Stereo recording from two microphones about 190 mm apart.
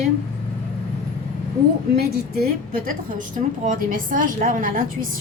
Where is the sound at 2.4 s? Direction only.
45° right (ahead or behind).